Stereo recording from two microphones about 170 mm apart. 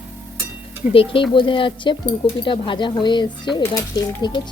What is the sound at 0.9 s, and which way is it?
Speech, 30° left (ahead or behind).